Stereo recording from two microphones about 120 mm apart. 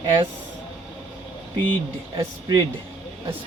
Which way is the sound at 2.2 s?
35° right (ahead or behind).